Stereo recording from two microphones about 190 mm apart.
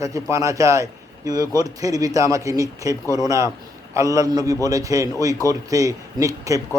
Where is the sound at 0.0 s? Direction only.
15° right (ahead or behind).